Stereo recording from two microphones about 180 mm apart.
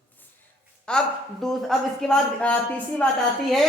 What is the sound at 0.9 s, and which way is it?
Speech, 5° left (ahead or behind).